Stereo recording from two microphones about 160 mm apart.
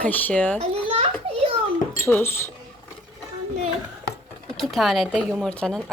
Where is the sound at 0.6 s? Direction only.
40° right (ahead or behind).